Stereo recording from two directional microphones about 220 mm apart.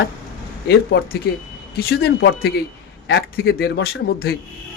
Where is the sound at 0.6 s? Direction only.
50° left (ahead or behind).